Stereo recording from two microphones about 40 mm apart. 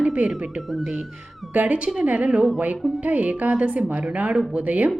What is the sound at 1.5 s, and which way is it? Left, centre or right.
A woman's voice, right.